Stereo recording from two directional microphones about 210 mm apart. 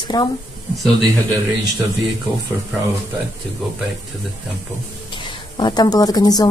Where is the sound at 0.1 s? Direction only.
20° left (ahead or behind).